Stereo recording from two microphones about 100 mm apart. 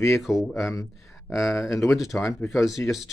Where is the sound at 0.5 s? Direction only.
30° left (ahead or behind).